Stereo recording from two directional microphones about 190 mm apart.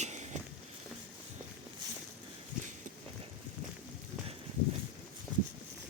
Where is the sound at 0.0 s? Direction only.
35° right (ahead or behind).